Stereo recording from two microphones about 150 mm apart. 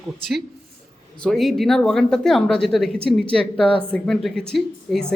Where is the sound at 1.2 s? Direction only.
Centre (ahead or behind).